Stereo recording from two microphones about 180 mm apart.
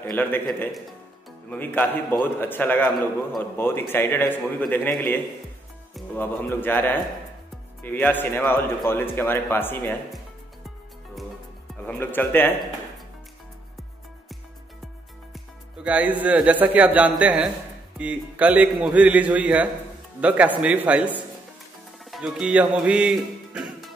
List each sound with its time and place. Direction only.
0.0 s a man's voice: 10° left (ahead or behind)
1.5 s a man's voice: 10° left (ahead or behind)
11.8 s a man's voice: 10° left (ahead or behind)
15.3 s a man's voice: 5° right (ahead or behind)
22.1 s speech: 5° right (ahead or behind)